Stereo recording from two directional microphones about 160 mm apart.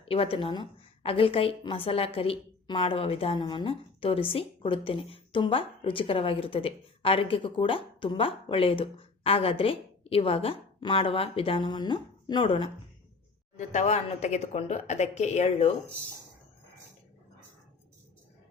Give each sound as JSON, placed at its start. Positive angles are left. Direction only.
{"t": 0.0, "sound": "a woman's voice", "side_deg": 35}
{"t": 13.6, "sound": "speech", "side_deg": 45}